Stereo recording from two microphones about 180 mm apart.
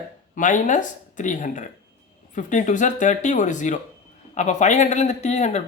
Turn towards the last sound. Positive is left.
turn(degrees=40)  # may be behind; listen again after turning